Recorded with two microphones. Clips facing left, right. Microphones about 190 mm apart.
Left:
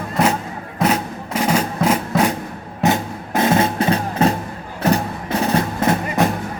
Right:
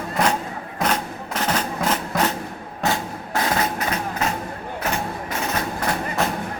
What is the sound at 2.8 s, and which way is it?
Music, 20° left (ahead or behind).